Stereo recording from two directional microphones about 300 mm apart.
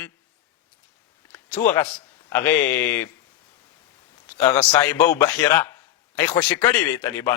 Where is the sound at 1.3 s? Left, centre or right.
Centre.